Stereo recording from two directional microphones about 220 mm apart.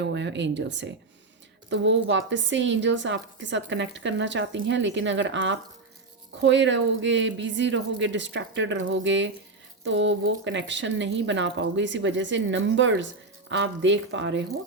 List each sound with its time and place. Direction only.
0.0 s a woman's voice: 50° right (ahead or behind)